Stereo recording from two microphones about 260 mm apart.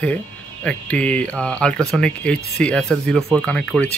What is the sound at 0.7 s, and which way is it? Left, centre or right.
Speech, centre.